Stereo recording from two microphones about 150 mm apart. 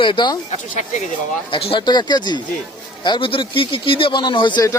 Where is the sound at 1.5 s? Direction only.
35° left (ahead or behind).